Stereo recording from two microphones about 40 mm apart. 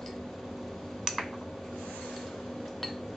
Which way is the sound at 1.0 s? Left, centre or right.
Centre.